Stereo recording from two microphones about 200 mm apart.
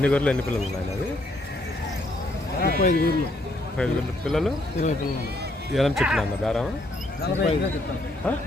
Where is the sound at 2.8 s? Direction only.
40° left (ahead or behind).